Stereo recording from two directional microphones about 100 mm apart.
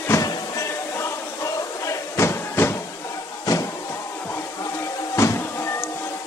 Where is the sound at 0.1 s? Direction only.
30° left (ahead or behind).